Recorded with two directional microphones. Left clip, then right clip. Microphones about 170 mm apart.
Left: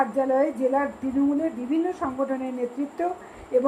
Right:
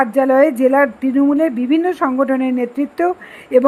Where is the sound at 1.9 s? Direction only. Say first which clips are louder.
Right 11 dB; 45° right (ahead or behind).